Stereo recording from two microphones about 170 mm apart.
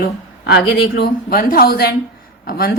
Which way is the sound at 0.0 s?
75° left (ahead or behind).